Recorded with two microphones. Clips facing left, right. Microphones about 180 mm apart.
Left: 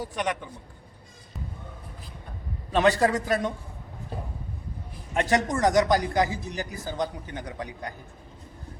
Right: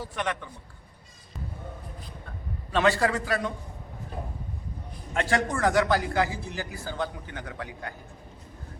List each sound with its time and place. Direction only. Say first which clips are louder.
0.0 s a man's voice: left 2 dB; 15° left (ahead or behind)
2.7 s a man's voice: left 2 dB; 20° left (ahead or behind)
5.1 s a man's voice: left 2 dB; 20° left (ahead or behind)